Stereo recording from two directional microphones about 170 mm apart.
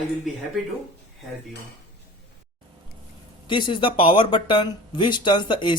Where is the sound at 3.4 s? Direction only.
30° left (ahead or behind).